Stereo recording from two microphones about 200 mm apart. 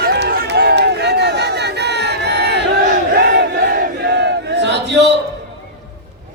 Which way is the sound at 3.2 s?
55° right (ahead or behind).